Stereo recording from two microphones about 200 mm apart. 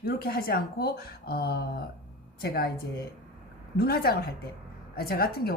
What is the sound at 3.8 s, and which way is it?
Speech, 50° left (ahead or behind).